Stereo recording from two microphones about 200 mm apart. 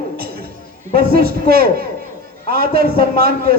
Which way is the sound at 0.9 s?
50° right (ahead or behind).